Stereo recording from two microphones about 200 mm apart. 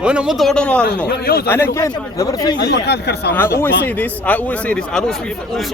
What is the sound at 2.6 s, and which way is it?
Speech, 55° left (ahead or behind).